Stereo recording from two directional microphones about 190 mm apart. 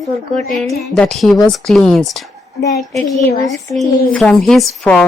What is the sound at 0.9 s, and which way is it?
A woman's voice, 5° left (ahead or behind).